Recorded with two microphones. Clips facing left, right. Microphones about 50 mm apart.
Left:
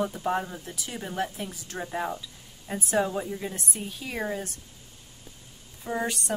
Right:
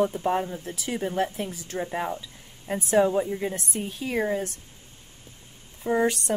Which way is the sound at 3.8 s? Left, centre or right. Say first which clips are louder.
Right 8 dB; right.